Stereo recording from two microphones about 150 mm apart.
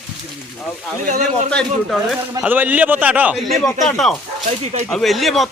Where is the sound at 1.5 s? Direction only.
5° left (ahead or behind).